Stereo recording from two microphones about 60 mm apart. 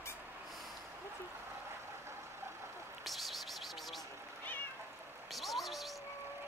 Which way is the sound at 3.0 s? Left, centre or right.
Centre.